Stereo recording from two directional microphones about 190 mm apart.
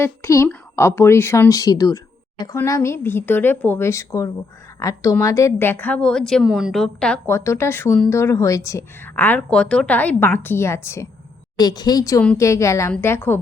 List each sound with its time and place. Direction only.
0.0 s a woman's voice: 15° left (ahead or behind)